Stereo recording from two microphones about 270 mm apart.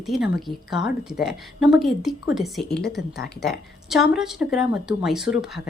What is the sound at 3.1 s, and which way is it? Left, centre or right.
Speech, left.